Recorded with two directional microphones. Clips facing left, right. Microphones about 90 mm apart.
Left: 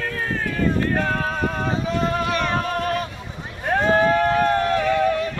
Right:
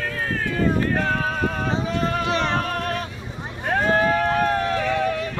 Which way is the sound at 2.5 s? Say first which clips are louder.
Left 2 dB; 5° left (ahead or behind).